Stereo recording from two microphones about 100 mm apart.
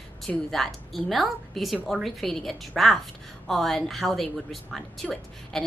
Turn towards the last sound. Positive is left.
turn(degrees=5)  # may be behind; listen again after turning